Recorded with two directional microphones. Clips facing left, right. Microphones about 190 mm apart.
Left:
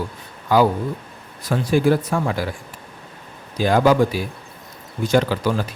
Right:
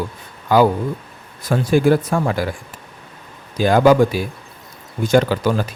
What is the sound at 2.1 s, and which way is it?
Speech, 50° right (ahead or behind).